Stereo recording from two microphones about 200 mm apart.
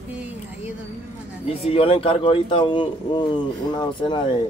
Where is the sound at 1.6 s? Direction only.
30° left (ahead or behind).